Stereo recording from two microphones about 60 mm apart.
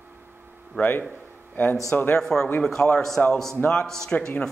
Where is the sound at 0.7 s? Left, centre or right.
Left.